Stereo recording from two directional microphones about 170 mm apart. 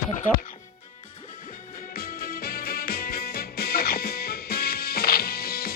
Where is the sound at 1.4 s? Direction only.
50° left (ahead or behind).